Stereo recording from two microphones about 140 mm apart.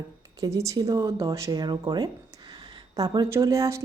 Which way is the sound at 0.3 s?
25° right (ahead or behind).